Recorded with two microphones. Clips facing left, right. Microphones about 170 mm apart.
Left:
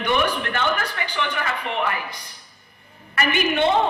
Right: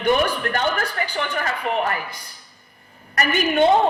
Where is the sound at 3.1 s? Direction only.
40° right (ahead or behind).